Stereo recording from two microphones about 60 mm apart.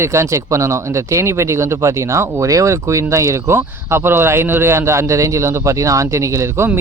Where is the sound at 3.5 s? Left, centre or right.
Right.